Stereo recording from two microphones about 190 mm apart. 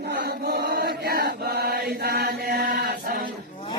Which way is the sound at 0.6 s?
55° right (ahead or behind).